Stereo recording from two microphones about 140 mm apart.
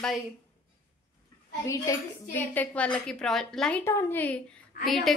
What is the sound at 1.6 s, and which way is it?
Speech, 25° left (ahead or behind).